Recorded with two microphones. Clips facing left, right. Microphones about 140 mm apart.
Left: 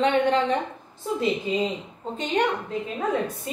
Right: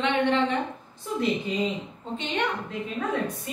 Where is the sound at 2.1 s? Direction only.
40° left (ahead or behind).